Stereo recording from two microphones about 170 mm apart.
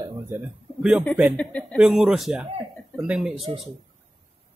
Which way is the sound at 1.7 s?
5° right (ahead or behind).